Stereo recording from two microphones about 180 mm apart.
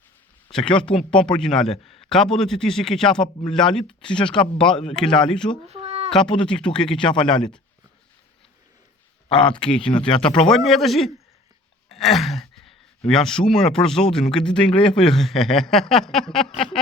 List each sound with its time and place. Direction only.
0.5 s a man's voice: 5° left (ahead or behind)
5.6 s a sound: 35° right (ahead or behind)
6.1 s a man's voice: 5° left (ahead or behind)
9.3 s speech: 25° left (ahead or behind)
9.6 s a man's voice: 5° left (ahead or behind)
11.9 s sigh: centre (ahead or behind)
13.1 s a man's voice: 5° left (ahead or behind)